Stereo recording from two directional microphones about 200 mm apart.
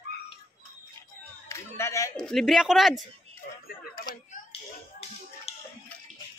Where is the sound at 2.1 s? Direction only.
5° left (ahead or behind).